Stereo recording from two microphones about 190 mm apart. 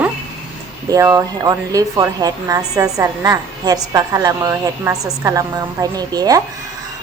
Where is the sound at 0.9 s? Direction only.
15° right (ahead or behind).